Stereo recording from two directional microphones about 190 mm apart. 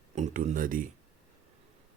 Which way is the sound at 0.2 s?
40° right (ahead or behind).